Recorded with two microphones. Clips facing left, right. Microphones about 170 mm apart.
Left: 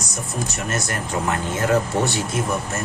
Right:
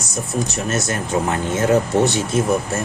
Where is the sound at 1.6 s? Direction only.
20° right (ahead or behind).